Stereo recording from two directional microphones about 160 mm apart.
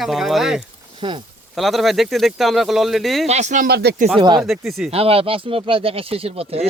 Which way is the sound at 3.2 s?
45° right (ahead or behind).